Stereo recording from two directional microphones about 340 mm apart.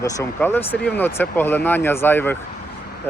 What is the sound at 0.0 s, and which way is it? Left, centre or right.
Speech, centre.